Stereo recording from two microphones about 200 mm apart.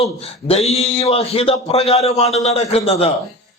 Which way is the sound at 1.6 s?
30° left (ahead or behind).